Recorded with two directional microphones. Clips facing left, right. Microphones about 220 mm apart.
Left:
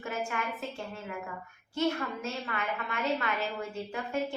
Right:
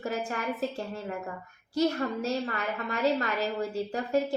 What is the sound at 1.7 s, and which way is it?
A woman's voice, 40° right (ahead or behind).